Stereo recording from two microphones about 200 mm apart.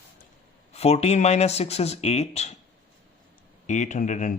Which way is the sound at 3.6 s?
40° left (ahead or behind).